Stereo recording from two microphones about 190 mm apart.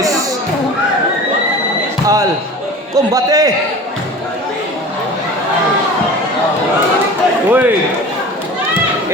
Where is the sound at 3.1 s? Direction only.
20° right (ahead or behind).